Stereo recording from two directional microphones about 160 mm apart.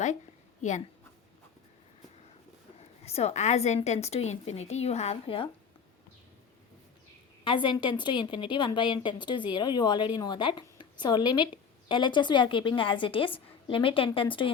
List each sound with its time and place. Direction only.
3.0 s a woman's voice: 40° left (ahead or behind)
7.4 s a woman's voice: 30° left (ahead or behind)